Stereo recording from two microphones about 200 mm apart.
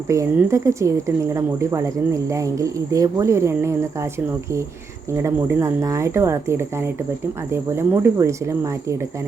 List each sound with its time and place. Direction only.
0.1 s speech: 15° right (ahead or behind)
5.1 s speech: 15° right (ahead or behind)